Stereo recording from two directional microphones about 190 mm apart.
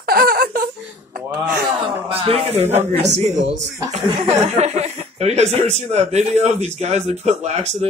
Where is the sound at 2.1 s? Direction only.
30° right (ahead or behind).